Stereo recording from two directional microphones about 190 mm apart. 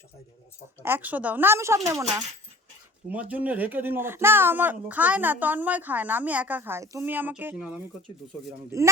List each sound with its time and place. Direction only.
0.8 s speech: 10° right (ahead or behind)